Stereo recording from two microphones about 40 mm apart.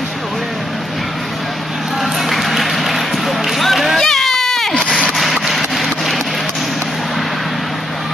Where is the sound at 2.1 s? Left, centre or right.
Centre.